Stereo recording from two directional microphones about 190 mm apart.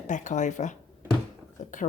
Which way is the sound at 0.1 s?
40° left (ahead or behind).